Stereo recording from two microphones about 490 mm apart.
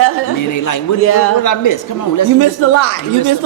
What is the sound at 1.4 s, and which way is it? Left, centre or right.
Speech, left.